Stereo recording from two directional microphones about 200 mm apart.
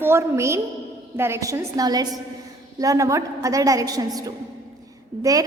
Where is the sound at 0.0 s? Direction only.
15° right (ahead or behind).